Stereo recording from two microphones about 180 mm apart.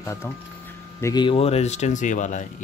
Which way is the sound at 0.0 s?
15° left (ahead or behind).